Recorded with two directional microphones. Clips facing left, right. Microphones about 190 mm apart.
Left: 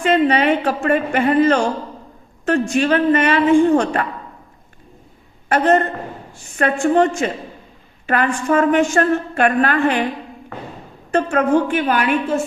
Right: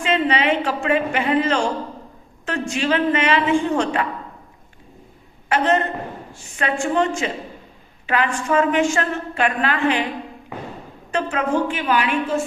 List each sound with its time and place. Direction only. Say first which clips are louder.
0.0 s a woman's voice: left 5 dB; 50° left (ahead or behind)
5.5 s a woman's voice: left 4 dB; 50° left (ahead or behind)
11.1 s a woman's voice: left 5 dB; 50° left (ahead or behind)